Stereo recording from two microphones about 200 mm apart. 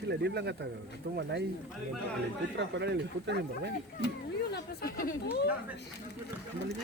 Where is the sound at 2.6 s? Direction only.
60° right (ahead or behind).